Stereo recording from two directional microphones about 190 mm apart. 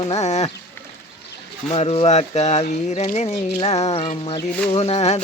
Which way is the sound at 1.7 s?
30° left (ahead or behind).